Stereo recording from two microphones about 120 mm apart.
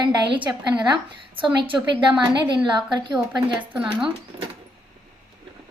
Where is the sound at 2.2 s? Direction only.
40° right (ahead or behind).